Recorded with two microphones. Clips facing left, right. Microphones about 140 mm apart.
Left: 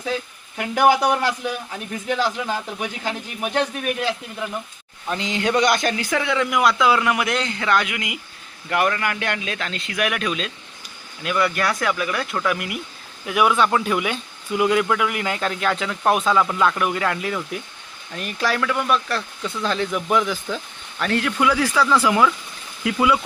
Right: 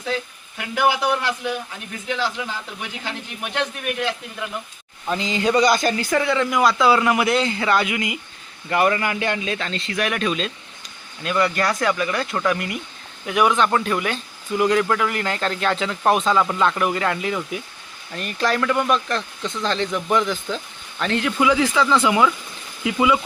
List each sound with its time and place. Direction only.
0.8 s speech: 40° left (ahead or behind)
5.0 s speech: centre (ahead or behind)
21.8 s speech: 5° left (ahead or behind)